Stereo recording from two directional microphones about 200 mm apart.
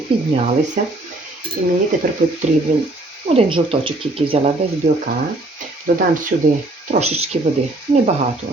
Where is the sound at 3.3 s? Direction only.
30° right (ahead or behind).